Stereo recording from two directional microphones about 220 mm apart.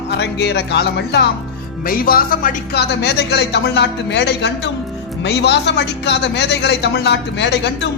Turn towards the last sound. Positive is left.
turn(degrees=50)  # may be behind; listen again after turning